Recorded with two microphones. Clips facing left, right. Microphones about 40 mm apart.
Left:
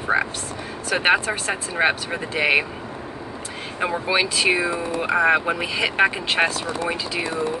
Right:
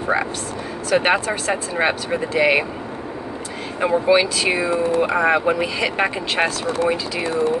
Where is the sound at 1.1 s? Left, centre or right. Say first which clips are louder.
Right 1 dB; centre.